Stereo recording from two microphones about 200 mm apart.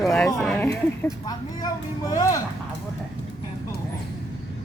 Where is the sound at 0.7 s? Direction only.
15° left (ahead or behind).